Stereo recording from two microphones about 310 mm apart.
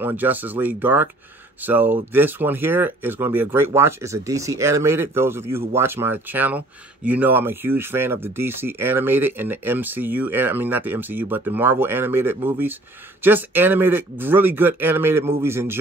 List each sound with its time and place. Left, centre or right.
0.0 s speech: centre